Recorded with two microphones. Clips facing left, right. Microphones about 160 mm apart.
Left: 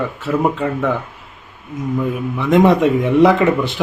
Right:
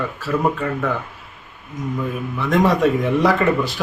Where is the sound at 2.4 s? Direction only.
20° left (ahead or behind).